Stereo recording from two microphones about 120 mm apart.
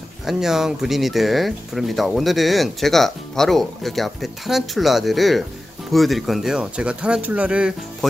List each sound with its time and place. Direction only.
0.3 s speech: 5° right (ahead or behind)